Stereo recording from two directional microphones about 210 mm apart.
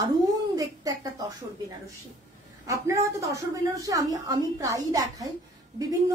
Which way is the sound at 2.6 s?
15° right (ahead or behind).